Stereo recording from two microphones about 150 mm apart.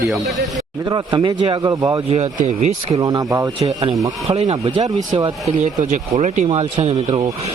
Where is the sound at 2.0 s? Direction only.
45° right (ahead or behind).